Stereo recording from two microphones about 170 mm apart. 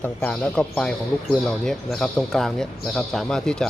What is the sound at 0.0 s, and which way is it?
A man's voice, 5° left (ahead or behind).